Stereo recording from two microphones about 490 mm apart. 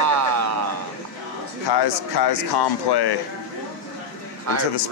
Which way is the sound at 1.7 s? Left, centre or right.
Left.